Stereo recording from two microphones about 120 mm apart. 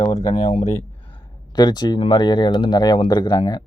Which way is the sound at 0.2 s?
40° left (ahead or behind).